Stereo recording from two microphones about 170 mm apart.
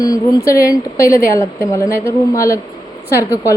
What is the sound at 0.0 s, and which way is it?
Speech, 20° left (ahead or behind).